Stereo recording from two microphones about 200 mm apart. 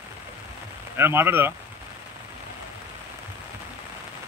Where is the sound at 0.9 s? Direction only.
10° right (ahead or behind).